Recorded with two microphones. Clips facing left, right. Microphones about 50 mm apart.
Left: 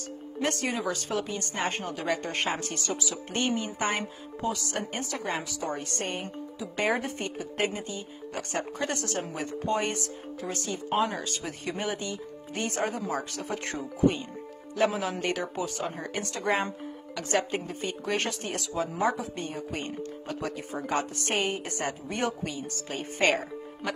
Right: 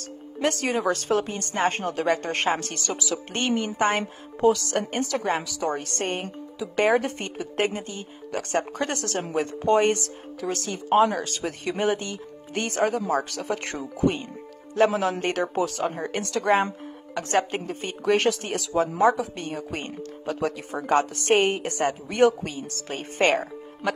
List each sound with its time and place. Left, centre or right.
0.4 s speech: right
0.7 s speech: right
4.4 s speech: right
6.9 s speech: right
11.8 s speech: right
14.9 s speech: right
18.1 s speech: right
20.0 s speech: right
21.8 s speech: right
22.4 s a woman's voice: right